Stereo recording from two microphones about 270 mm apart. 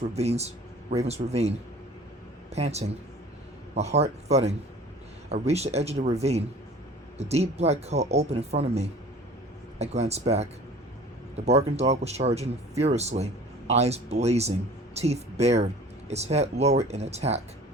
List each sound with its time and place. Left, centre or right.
0.1 s speech: right
2.6 s speech: right